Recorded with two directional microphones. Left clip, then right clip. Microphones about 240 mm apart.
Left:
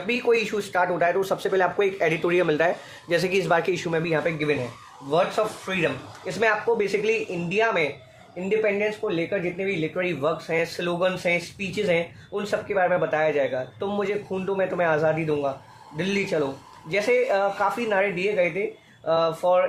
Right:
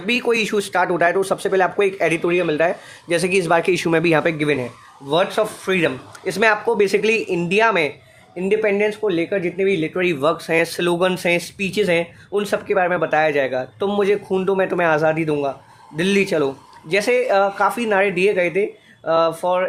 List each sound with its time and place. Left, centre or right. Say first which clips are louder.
0.1 s speech: right 4 dB; right